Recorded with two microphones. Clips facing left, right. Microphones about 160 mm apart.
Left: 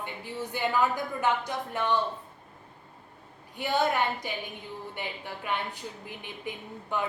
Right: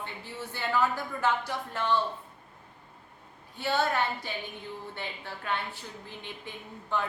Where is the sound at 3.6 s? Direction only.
15° left (ahead or behind).